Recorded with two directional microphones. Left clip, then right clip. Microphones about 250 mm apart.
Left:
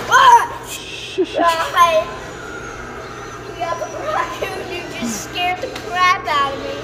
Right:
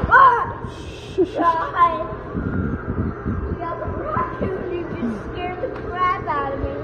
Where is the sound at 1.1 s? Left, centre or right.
Left.